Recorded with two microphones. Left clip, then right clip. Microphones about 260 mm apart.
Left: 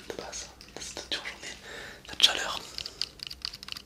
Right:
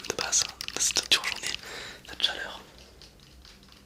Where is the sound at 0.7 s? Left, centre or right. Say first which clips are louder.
Right 11 dB; centre.